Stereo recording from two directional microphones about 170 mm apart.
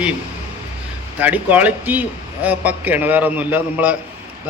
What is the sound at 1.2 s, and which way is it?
A man's voice, 10° right (ahead or behind).